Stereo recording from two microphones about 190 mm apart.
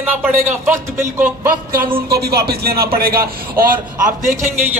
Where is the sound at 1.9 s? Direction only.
55° right (ahead or behind).